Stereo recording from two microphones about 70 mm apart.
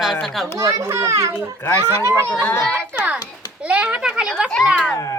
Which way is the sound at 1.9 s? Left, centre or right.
Right.